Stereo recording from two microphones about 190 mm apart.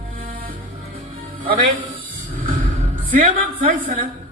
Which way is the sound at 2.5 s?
45° right (ahead or behind).